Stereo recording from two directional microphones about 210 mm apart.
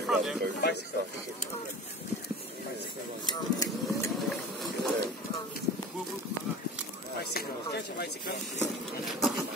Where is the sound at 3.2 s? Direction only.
15° left (ahead or behind).